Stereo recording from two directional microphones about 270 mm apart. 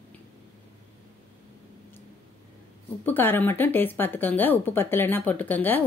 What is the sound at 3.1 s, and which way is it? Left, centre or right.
Speech, centre.